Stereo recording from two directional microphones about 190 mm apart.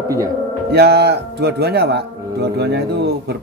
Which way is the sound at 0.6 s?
60° right (ahead or behind).